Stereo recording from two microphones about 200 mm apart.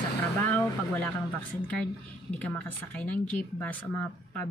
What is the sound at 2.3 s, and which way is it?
A woman's voice, 5° left (ahead or behind).